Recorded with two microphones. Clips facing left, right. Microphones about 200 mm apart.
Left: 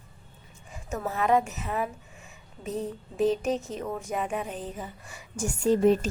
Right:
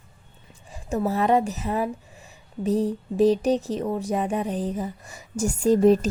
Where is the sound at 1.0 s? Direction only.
35° right (ahead or behind).